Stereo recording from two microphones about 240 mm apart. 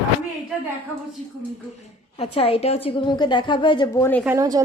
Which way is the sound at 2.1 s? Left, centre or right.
Left.